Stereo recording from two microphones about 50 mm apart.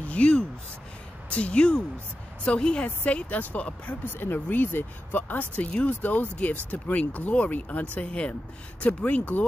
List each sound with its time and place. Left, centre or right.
0.0 s speech: left
4.0 s speech: left